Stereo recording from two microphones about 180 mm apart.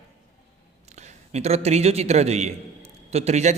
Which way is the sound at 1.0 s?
40° right (ahead or behind).